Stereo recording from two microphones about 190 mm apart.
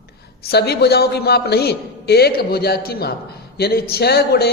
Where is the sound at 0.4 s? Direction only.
60° left (ahead or behind).